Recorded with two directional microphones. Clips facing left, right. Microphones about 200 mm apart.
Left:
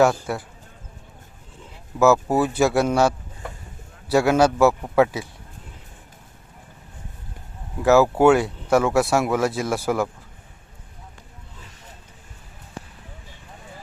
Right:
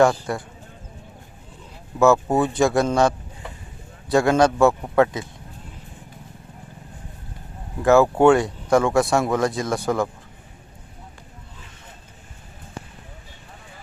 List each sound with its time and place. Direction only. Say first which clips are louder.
0.0 s a man's voice: right 1 dB; 5° left (ahead or behind)
2.0 s a man's voice: even; centre (ahead or behind)
7.8 s a man's voice: even; 5° left (ahead or behind)